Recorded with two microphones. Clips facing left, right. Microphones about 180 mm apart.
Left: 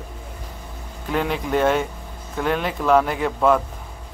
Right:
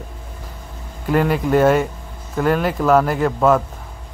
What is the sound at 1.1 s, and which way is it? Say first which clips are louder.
A man's voice: right 6 dB; 5° right (ahead or behind).